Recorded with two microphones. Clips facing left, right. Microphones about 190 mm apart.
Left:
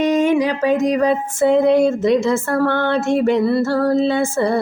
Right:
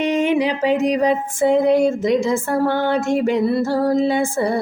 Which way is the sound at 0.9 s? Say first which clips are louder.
Left 1 dB; 15° right (ahead or behind).